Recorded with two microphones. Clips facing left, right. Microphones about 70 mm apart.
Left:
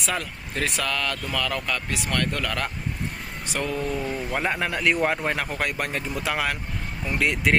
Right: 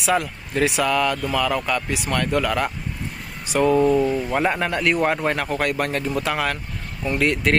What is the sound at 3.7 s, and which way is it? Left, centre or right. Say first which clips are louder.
Speech: right 13 dB; right.